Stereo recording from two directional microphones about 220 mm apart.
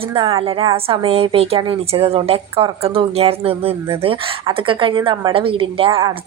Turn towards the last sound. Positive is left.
turn(degrees=-25)  # may be behind; listen again after turning